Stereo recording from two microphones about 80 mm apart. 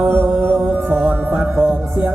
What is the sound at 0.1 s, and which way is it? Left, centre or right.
Music, right.